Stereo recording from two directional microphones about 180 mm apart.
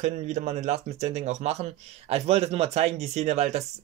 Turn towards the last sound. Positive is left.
turn(degrees=-40)  # may be behind; listen again after turning